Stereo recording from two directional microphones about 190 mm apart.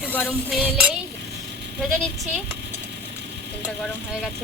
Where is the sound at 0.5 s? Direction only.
5° right (ahead or behind).